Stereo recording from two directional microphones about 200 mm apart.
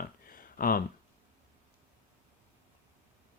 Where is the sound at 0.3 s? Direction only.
45° left (ahead or behind).